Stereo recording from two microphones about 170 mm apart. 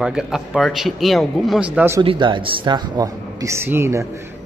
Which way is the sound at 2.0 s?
30° right (ahead or behind).